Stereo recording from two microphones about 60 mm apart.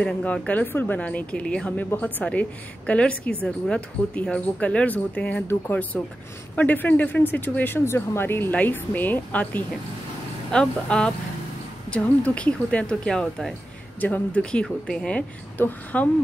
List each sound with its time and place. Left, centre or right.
0.0 s speech: left
10.5 s speech: centre
14.0 s speech: left
14.4 s speech: centre
15.5 s speech: left